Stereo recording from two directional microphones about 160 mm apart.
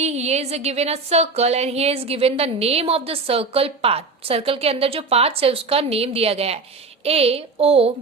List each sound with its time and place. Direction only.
0.0 s speech: 45° right (ahead or behind)